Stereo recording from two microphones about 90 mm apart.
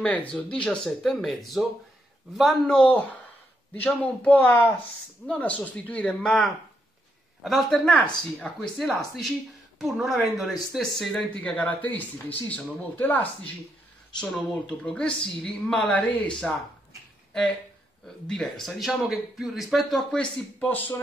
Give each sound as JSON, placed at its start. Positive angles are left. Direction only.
{"t": 0.0, "sound": "a woman's voice", "side_deg": 15}
{"t": 2.6, "sound": "a woman's voice", "side_deg": 10}
{"t": 7.4, "sound": "a man's voice", "side_deg": 0}
{"t": 11.4, "sound": "a woman's voice", "side_deg": 15}
{"t": 18.2, "sound": "a man's voice", "side_deg": 10}
{"t": 20.5, "sound": "speech", "side_deg": 20}